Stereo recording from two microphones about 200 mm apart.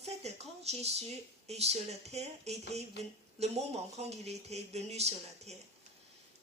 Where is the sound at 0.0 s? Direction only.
35° right (ahead or behind).